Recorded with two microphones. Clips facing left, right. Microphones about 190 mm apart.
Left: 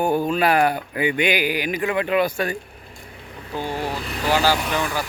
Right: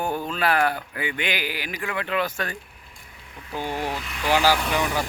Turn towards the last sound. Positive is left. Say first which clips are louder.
# even
turn(degrees=-20)  # may be behind; listen again after turning